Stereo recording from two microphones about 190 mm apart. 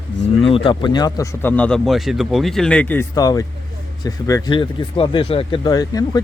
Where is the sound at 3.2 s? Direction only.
20° left (ahead or behind).